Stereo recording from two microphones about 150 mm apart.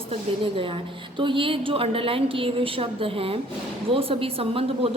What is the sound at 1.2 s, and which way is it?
Speech, 35° right (ahead or behind).